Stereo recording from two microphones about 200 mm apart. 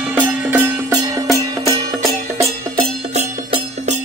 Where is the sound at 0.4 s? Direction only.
10° right (ahead or behind).